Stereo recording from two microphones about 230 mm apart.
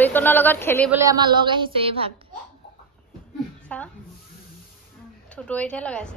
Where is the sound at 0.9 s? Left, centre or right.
Centre.